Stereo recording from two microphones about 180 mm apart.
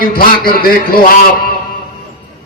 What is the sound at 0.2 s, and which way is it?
Speech, 55° left (ahead or behind).